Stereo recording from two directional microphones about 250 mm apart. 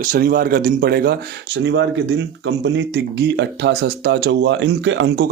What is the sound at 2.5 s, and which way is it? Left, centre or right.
Speech, right.